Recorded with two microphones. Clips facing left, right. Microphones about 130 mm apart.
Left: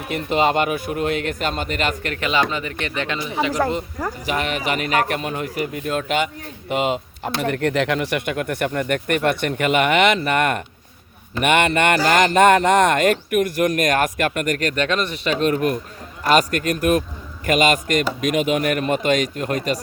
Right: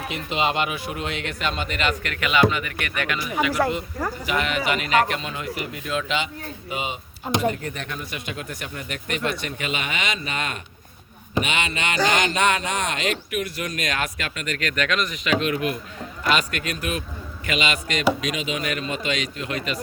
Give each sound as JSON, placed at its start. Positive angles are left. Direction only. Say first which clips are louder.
{"t": 0.1, "sound": "speech", "louder": "left 7 dB", "side_deg": 50}
{"t": 4.3, "sound": "speech", "louder": "left 1 dB", "side_deg": 40}
{"t": 7.3, "sound": "speech", "louder": "right 1 dB", "side_deg": -15}
{"t": 7.5, "sound": "speech", "louder": "left 12 dB", "side_deg": 80}